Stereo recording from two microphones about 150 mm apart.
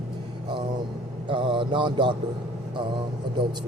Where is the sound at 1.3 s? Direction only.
35° right (ahead or behind).